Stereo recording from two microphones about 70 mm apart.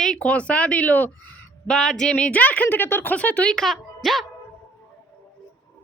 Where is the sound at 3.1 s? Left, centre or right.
Left.